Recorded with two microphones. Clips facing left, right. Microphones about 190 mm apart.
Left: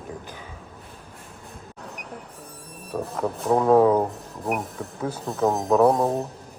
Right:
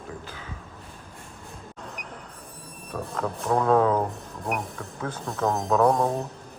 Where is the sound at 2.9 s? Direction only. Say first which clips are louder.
Left 3 dB; 20° left (ahead or behind); by 6.0 s 5° left (ahead or behind).